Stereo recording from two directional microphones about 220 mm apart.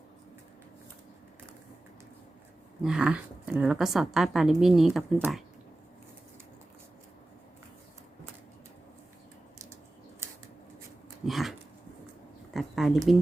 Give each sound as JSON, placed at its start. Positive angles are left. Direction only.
{"t": 2.8, "sound": "a woman's voice", "side_deg": -5}
{"t": 11.3, "sound": "dog", "side_deg": 0}
{"t": 12.5, "sound": "a sound", "side_deg": 0}